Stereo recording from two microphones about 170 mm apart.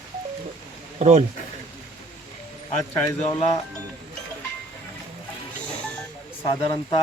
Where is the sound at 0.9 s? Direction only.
40° right (ahead or behind).